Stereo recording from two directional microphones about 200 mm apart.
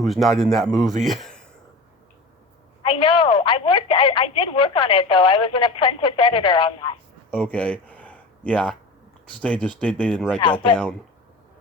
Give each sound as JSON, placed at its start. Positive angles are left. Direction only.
{"t": 0.0, "sound": "speech", "side_deg": 0}
{"t": 2.8, "sound": "a woman's voice", "side_deg": 25}
{"t": 7.3, "sound": "a sound", "side_deg": 5}
{"t": 9.2, "sound": "speech", "side_deg": 5}